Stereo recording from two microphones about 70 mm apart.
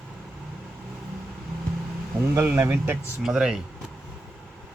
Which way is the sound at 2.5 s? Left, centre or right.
Right.